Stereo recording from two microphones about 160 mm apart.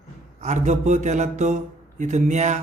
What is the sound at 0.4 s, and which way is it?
A man's voice, 50° right (ahead or behind).